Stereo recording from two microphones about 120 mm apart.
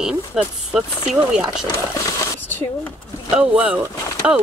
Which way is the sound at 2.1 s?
15° left (ahead or behind).